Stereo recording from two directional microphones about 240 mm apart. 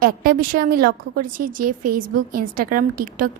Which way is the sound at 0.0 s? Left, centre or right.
Right.